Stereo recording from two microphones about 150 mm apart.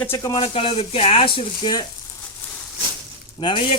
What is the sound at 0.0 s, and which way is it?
Speech, 20° left (ahead or behind).